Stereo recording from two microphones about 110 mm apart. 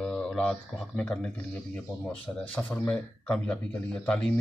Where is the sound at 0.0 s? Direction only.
5° left (ahead or behind).